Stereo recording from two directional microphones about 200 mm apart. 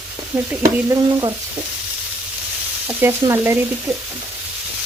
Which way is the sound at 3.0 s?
10° right (ahead or behind).